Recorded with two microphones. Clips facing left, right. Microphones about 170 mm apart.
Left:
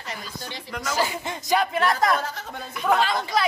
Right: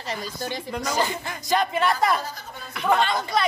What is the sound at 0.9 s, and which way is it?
Snicker, 10° left (ahead or behind).